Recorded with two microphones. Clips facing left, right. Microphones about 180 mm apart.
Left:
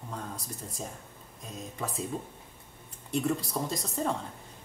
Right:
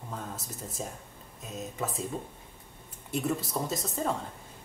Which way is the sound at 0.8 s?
Centre (ahead or behind).